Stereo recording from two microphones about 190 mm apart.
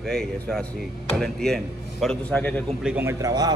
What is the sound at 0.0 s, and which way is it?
A man's voice, centre (ahead or behind).